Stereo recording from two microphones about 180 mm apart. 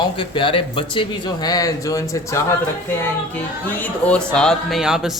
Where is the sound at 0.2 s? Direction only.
30° left (ahead or behind).